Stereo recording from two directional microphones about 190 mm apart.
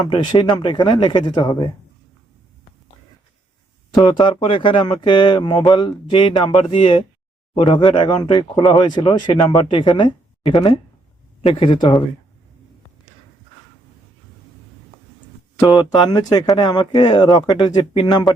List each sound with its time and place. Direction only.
0.1 s speech: 25° left (ahead or behind)
3.9 s speech: 25° left (ahead or behind)
15.6 s speech: 25° left (ahead or behind)